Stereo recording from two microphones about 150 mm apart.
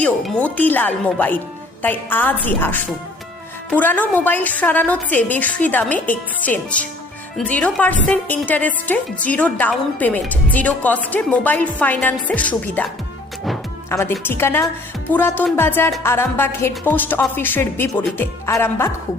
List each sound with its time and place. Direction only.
0.0 s a woman's voice: 10° left (ahead or behind)
13.9 s a woman's voice: 15° left (ahead or behind)